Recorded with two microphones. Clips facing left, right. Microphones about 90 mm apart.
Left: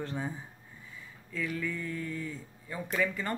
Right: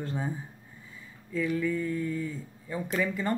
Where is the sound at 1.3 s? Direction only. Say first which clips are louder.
Right 6 dB; 10° right (ahead or behind).